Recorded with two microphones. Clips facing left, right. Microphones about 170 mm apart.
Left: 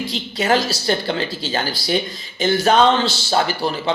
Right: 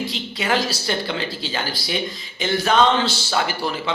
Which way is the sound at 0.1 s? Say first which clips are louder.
Left 4 dB; 40° left (ahead or behind).